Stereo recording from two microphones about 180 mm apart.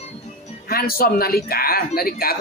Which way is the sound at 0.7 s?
55° left (ahead or behind).